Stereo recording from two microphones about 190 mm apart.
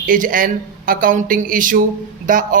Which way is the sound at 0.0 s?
45° right (ahead or behind).